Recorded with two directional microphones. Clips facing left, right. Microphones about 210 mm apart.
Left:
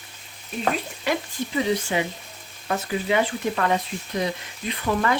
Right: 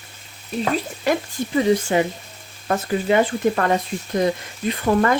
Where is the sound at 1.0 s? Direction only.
45° right (ahead or behind).